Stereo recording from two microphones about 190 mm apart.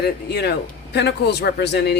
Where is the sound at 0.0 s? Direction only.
60° left (ahead or behind).